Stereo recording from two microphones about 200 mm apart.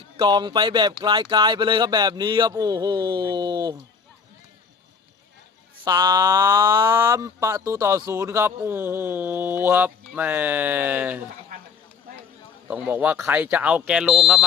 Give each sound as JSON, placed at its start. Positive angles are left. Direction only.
{"t": 0.2, "sound": "speech", "side_deg": -20}
{"t": 5.8, "sound": "speech", "side_deg": -20}
{"t": 12.6, "sound": "speech", "side_deg": -10}